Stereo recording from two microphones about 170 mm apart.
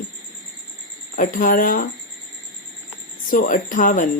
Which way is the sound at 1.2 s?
50° left (ahead or behind).